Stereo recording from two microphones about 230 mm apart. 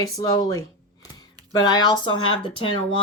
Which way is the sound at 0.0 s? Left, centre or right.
Centre.